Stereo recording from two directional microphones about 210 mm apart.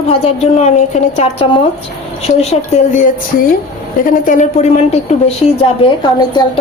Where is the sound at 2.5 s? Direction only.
40° left (ahead or behind).